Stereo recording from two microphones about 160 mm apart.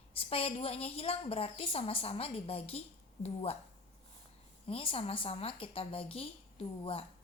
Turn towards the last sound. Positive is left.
turn(degrees=35)  # may be behind; listen again after turning